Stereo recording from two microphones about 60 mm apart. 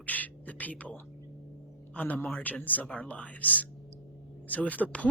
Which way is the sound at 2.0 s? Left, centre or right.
Left.